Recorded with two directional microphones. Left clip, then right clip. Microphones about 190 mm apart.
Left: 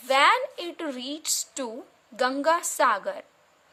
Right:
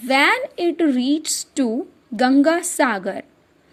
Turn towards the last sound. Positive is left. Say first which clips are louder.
# right 3 dB
turn(degrees=-15)  # may be behind; listen again after turning